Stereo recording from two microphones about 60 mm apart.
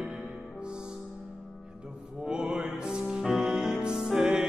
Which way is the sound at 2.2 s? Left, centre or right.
Centre.